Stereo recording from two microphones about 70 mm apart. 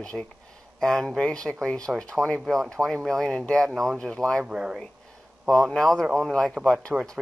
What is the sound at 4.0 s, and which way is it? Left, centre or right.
Speech, centre.